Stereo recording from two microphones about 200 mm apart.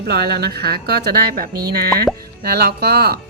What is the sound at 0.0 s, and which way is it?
Speech, 55° right (ahead or behind).